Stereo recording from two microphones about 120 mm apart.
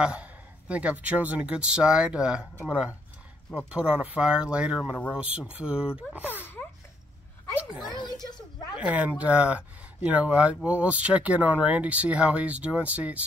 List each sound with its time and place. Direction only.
0.0 s speech: 10° right (ahead or behind)
7.9 s a sound: 35° left (ahead or behind)
8.7 s speech: 10° right (ahead or behind)